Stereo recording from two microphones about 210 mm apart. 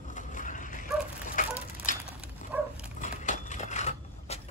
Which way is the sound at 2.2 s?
5° right (ahead or behind).